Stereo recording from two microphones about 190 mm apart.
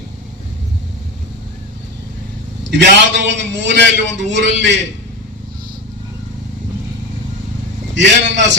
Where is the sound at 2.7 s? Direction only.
65° right (ahead or behind).